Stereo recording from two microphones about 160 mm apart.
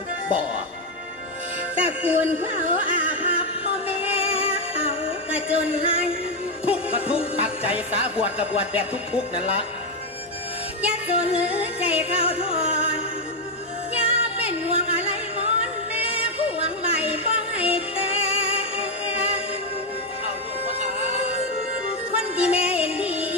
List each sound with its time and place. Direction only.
2.0 s music: 35° left (ahead or behind)
11.1 s music: 35° left (ahead or behind)
13.9 s music: 35° left (ahead or behind)
22.1 s music: 35° left (ahead or behind)